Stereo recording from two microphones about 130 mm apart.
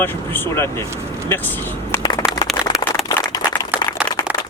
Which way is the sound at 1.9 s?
25° left (ahead or behind).